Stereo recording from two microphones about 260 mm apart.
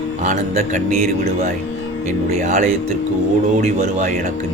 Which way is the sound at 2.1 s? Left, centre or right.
Right.